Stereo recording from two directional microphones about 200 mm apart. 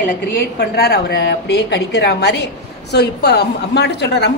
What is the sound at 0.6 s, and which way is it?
A woman's voice, 50° left (ahead or behind).